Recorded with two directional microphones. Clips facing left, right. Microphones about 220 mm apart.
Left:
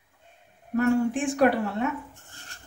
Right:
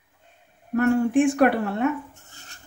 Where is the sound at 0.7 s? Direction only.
60° right (ahead or behind).